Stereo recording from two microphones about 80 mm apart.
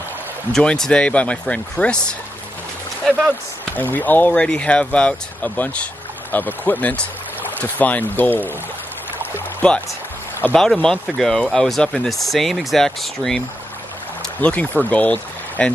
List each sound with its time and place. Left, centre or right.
0.5 s speech: centre
3.7 s speech: left
9.2 s boat: centre
10.5 s speech: centre
14.4 s speech: centre